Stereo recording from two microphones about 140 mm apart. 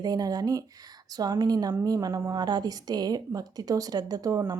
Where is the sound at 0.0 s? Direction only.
30° right (ahead or behind).